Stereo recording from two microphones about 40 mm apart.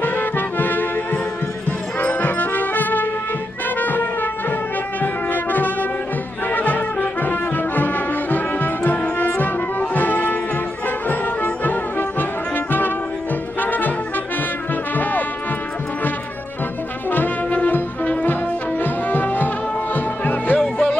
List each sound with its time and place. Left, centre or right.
0.0 s music: left
17.5 s music: left
20.5 s music: left